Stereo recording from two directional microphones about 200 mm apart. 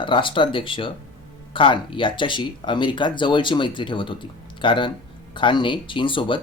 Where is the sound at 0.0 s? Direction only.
25° left (ahead or behind).